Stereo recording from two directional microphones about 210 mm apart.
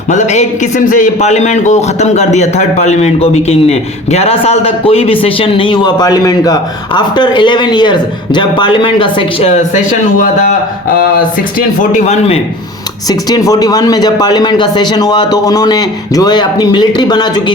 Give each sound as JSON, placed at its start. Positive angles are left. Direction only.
{"t": 0.1, "sound": "a man's voice", "side_deg": 35}
{"t": 11.8, "sound": "a man's voice", "side_deg": 35}
{"t": 13.1, "sound": "a man's voice", "side_deg": 15}